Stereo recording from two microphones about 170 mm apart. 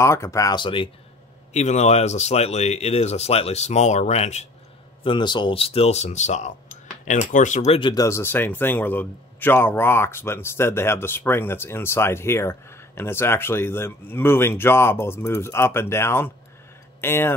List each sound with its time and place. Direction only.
0.0 s speech: 15° left (ahead or behind)
1.5 s speech: 40° left (ahead or behind)
5.0 s speech: 30° left (ahead or behind)
7.9 s a man's voice: 20° left (ahead or behind)